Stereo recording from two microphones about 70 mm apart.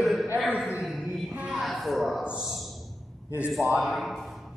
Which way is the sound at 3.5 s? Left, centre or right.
Centre.